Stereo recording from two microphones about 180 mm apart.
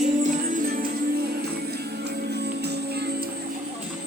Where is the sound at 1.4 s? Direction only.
65° right (ahead or behind).